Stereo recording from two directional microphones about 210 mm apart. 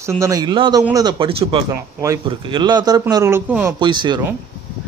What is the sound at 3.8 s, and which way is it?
Speech, 20° right (ahead or behind).